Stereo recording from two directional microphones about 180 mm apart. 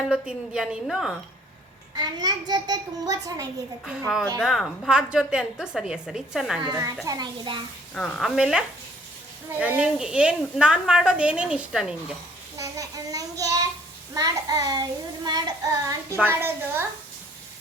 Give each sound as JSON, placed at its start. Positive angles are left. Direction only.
{"t": 0.1, "sound": "a woman's voice", "side_deg": -5}
{"t": 2.0, "sound": "child singing", "side_deg": -25}
{"t": 4.4, "sound": "a woman's voice", "side_deg": 0}
{"t": 6.6, "sound": "child singing", "side_deg": -20}
{"t": 7.9, "sound": "a woman's voice", "side_deg": 5}
{"t": 12.5, "sound": "child singing", "side_deg": -20}
{"t": 16.1, "sound": "a child's voice", "side_deg": -10}